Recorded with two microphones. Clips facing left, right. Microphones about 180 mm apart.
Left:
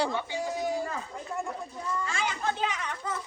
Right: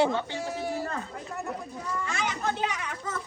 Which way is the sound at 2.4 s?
50° right (ahead or behind).